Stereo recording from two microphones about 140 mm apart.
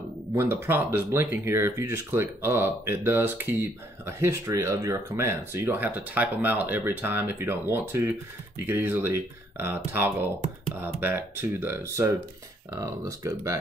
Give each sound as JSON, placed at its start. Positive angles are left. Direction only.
{"t": 0.4, "sound": "speech", "side_deg": -15}